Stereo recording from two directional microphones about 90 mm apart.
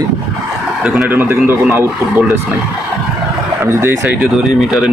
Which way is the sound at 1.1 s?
25° right (ahead or behind).